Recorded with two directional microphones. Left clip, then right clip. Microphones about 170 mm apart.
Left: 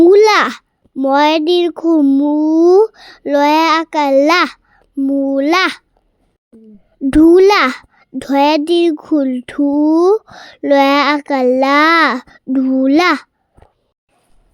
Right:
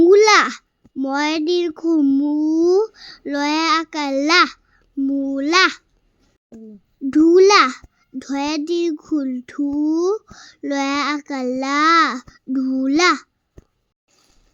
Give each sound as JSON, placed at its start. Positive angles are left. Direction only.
{"t": 0.0, "sound": "a child's voice", "side_deg": 30}
{"t": 4.8, "sound": "a child's voice", "side_deg": 20}
{"t": 7.1, "sound": "a child's voice", "side_deg": 40}